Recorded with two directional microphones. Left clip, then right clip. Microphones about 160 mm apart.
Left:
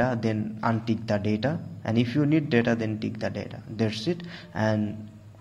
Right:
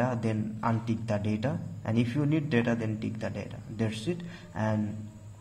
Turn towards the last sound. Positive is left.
turn(degrees=20)  # may be behind; listen again after turning